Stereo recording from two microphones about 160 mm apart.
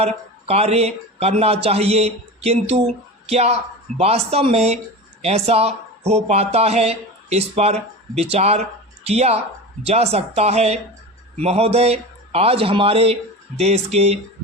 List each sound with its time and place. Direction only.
0.0 s a man's voice: 40° right (ahead or behind)